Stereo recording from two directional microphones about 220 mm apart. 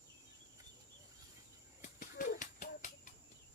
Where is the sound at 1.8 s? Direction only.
35° left (ahead or behind).